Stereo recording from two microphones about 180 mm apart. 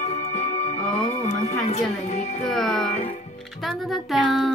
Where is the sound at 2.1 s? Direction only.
40° left (ahead or behind).